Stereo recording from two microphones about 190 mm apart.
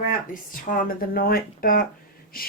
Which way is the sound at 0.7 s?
50° left (ahead or behind).